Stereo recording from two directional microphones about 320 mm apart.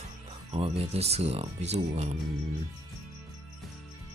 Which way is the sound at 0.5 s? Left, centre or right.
Centre.